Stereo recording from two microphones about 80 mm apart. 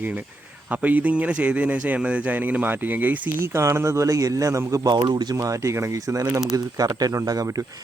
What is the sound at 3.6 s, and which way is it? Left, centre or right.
A man's voice, right.